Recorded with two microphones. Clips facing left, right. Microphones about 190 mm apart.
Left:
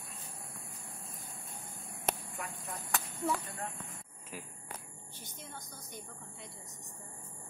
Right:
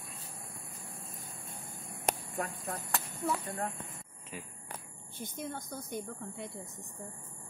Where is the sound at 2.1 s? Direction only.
45° right (ahead or behind).